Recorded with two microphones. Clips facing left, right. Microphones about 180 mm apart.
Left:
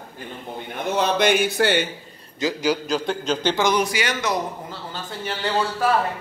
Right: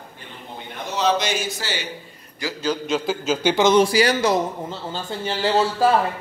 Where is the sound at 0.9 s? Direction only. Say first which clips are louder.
Left 2 dB; 55° left (ahead or behind).